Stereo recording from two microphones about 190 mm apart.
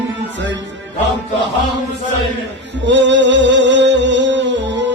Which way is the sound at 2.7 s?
70° right (ahead or behind).